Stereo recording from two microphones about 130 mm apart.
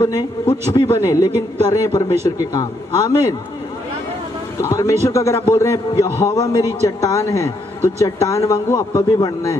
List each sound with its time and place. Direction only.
0.5 s speech: 45° left (ahead or behind)
1.0 s speech: 25° left (ahead or behind)
4.6 s speech: 20° left (ahead or behind)